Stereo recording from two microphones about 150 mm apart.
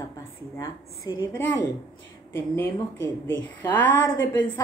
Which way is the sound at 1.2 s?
15° left (ahead or behind).